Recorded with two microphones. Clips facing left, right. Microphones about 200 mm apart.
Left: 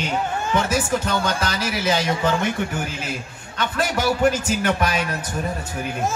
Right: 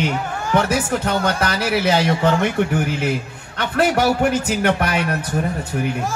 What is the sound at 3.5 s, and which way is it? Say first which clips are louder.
A man's voice: right 6 dB; 60° right (ahead or behind).